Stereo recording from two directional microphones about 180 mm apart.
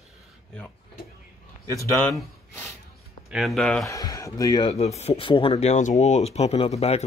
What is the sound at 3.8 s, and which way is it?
Speech, 20° left (ahead or behind).